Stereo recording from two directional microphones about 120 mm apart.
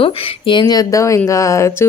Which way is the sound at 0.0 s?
40° left (ahead or behind).